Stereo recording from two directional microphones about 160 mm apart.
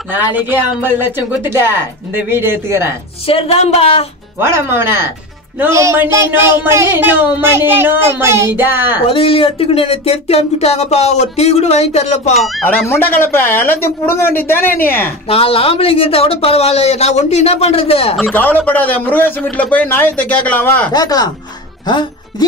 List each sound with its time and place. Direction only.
0.1 s speech: 10° right (ahead or behind)
3.3 s speech: 40° left (ahead or behind)
4.4 s speech: 15° right (ahead or behind)
9.0 s speech: 35° left (ahead or behind)
12.6 s a man's voice: 15° left (ahead or behind)
15.2 s speech: 35° left (ahead or behind)
18.3 s a man's voice: 10° left (ahead or behind)
20.9 s speech: 25° left (ahead or behind)